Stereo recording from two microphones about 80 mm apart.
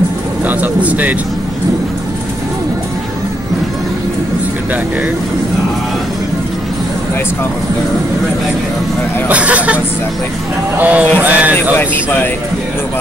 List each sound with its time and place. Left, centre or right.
0.5 s speech: centre
9.3 s speech: centre
10.8 s speech: centre
11.7 s speech: left